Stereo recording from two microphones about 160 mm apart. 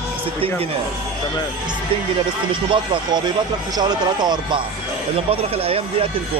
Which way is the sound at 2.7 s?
30° right (ahead or behind).